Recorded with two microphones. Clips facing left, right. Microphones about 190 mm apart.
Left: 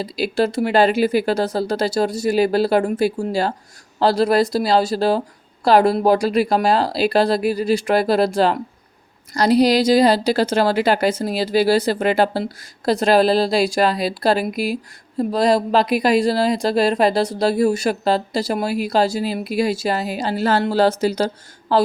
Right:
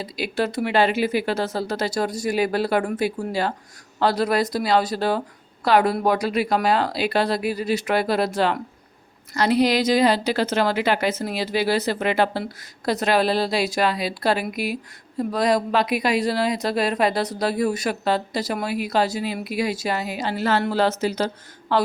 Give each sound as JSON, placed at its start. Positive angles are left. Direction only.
{"t": 0.0, "sound": "a woman's voice", "side_deg": 35}
{"t": 9.3, "sound": "a woman's voice", "side_deg": 35}